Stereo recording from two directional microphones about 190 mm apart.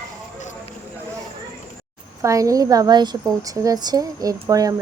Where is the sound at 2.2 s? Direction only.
15° right (ahead or behind).